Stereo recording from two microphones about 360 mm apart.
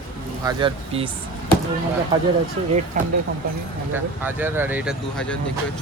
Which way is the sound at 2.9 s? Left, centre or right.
Right.